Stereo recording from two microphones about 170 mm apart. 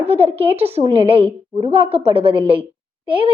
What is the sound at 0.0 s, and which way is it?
A woman's voice, 35° right (ahead or behind).